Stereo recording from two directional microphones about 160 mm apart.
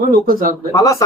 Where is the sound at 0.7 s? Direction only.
20° left (ahead or behind).